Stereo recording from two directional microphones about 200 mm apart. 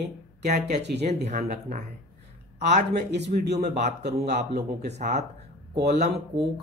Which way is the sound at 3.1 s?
55° right (ahead or behind).